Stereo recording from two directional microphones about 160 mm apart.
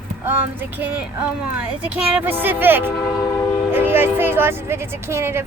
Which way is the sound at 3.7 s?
15° right (ahead or behind).